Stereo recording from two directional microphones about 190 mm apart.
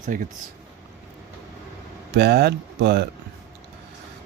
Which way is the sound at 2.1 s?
60° right (ahead or behind).